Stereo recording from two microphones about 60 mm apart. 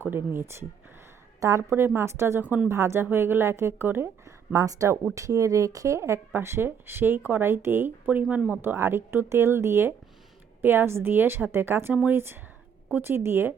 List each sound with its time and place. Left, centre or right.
0.0 s speech: right
1.4 s a woman's voice: right
2.0 s speech: right
4.3 s speech: right
6.3 s speech: right
8.6 s speech: right